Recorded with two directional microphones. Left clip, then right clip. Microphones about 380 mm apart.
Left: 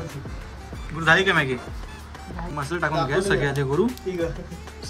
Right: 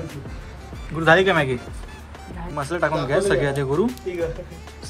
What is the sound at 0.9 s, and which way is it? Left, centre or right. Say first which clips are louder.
Speech: right 2 dB; centre.